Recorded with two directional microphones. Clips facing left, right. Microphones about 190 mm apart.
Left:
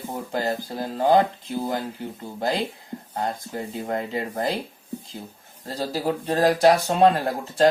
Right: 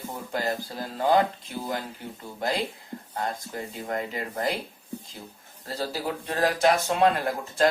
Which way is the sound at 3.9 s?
25° left (ahead or behind).